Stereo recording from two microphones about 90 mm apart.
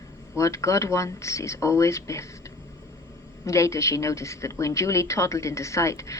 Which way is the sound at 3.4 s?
35° left (ahead or behind).